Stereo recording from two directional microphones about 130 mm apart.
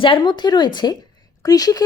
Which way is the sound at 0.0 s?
40° left (ahead or behind).